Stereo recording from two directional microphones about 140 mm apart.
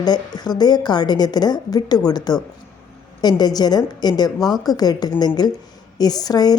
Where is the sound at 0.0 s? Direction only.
30° left (ahead or behind).